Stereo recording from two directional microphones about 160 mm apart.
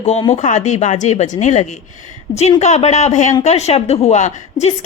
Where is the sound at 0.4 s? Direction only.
45° left (ahead or behind).